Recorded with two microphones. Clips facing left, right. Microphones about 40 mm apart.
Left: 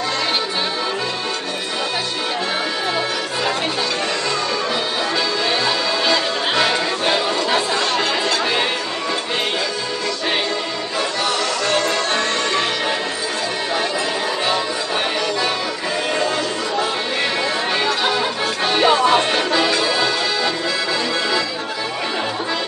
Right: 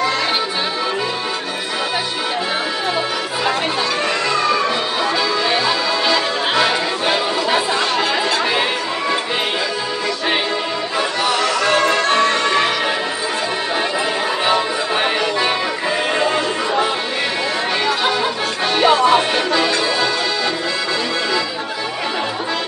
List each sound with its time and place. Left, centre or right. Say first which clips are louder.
5.5 s music: right 2 dB; centre
11.0 s music: right 2 dB; centre
16.2 s a sound: right 3 dB; centre
17.8 s music: right 1 dB; centre